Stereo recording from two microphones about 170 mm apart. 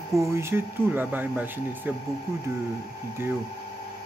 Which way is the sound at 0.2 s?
15° right (ahead or behind).